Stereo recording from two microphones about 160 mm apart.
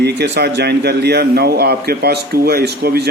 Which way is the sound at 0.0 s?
90° right.